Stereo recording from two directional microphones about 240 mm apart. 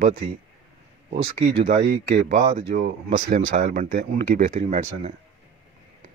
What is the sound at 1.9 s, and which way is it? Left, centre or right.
Speech, right.